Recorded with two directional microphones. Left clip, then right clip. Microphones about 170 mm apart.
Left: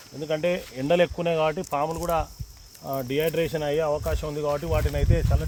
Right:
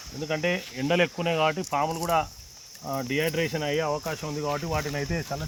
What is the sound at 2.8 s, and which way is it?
Speech, 65° left (ahead or behind).